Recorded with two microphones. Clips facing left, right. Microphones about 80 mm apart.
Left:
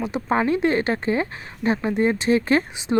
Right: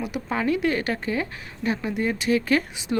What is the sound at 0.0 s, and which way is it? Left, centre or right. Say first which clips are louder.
Speech: left 4 dB; left.